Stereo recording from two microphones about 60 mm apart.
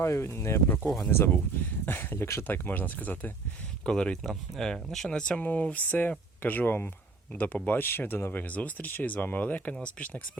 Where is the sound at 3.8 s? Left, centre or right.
Centre.